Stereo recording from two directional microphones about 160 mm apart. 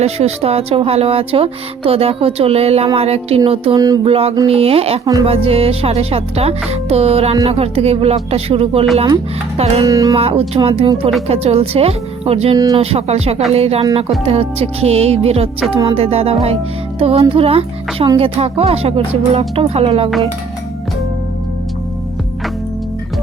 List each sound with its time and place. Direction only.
0.0 s speech: 40° right (ahead or behind)
3.8 s speech: 25° right (ahead or behind)
4.0 s speech: 35° right (ahead or behind)
9.8 s speech: 25° right (ahead or behind)
10.2 s speech: 40° right (ahead or behind)
12.5 s speech: 25° right (ahead or behind)
12.8 s speech: 40° right (ahead or behind)